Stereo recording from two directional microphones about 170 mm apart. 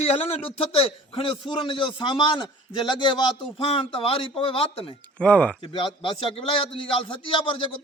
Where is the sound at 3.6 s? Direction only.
35° left (ahead or behind).